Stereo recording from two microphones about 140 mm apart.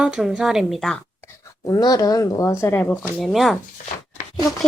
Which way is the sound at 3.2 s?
Centre (ahead or behind).